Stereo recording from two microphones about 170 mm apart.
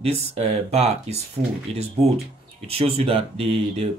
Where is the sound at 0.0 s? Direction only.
35° right (ahead or behind).